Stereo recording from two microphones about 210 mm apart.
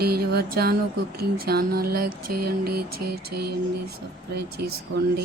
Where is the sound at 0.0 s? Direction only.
45° right (ahead or behind).